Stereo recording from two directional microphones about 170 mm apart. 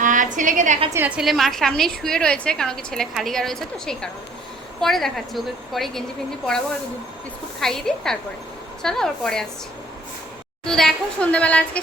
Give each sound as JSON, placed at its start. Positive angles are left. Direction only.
{"t": 0.0, "sound": "a sound", "side_deg": -50}
{"t": 0.9, "sound": "a woman's voice", "side_deg": -10}
{"t": 7.6, "sound": "a woman's voice", "side_deg": 0}
{"t": 10.7, "sound": "a woman's voice", "side_deg": 5}